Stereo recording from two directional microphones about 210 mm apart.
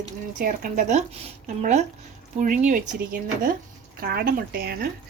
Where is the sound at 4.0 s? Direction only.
45° right (ahead or behind).